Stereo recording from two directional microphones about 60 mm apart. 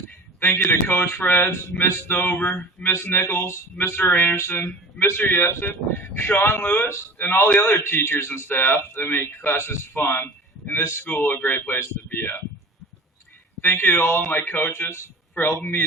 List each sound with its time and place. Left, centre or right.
0.3 s speech: left
1.7 s a sound: centre
2.0 s speech: left
3.9 s speech: left
13.6 s speech: left